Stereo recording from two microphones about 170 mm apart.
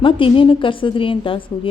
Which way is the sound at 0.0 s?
30° left (ahead or behind).